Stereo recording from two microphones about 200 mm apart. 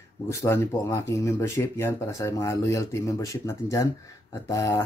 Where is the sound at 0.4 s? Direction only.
15° left (ahead or behind).